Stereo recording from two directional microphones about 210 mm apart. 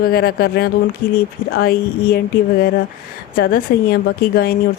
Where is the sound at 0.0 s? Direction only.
45° left (ahead or behind).